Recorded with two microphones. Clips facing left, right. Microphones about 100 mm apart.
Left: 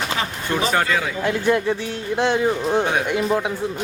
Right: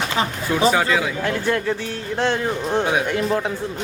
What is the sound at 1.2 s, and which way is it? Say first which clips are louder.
Speech: left 2 dB; 15° left (ahead or behind).